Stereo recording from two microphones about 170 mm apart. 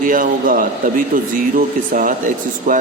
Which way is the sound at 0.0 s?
55° right (ahead or behind).